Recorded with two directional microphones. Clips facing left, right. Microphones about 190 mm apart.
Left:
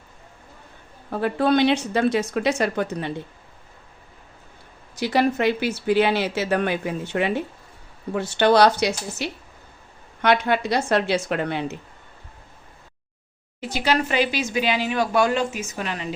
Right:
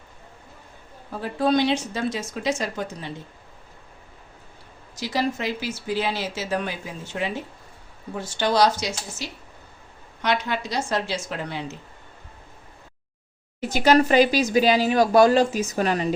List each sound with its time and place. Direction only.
1.1 s speech: 60° left (ahead or behind)
4.9 s speech: 60° left (ahead or behind)
13.6 s speech: 45° right (ahead or behind)